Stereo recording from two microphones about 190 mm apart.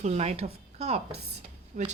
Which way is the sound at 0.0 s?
35° right (ahead or behind).